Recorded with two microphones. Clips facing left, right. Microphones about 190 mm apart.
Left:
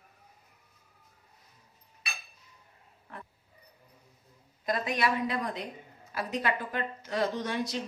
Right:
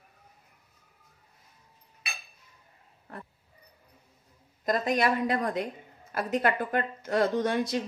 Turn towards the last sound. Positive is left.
turn(degrees=-50)  # may be behind; listen again after turning